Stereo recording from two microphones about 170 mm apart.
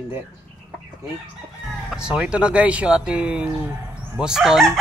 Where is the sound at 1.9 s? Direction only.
5° right (ahead or behind).